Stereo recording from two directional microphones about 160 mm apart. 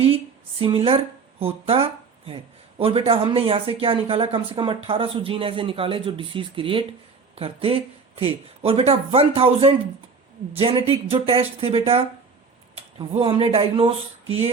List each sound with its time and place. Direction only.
0.6 s speech: 35° right (ahead or behind)